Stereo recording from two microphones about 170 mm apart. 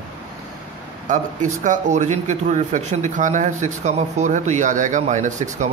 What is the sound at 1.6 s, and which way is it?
Speech, 45° right (ahead or behind).